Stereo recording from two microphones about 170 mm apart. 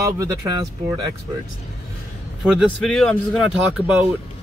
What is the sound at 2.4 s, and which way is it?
Speech, centre (ahead or behind).